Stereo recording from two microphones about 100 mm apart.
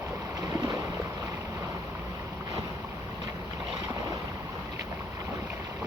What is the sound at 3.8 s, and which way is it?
Boat, 35° right (ahead or behind).